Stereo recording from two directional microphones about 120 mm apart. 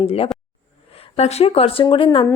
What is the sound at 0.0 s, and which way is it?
A woman's voice, 55° left (ahead or behind).